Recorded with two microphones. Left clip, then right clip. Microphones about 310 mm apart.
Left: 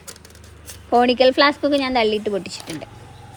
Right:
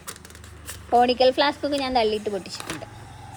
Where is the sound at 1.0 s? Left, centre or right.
Centre.